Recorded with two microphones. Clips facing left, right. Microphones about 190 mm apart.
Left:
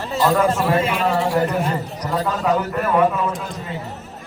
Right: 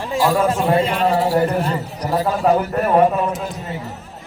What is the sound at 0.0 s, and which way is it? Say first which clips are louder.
Speech: even; 10° right (ahead or behind).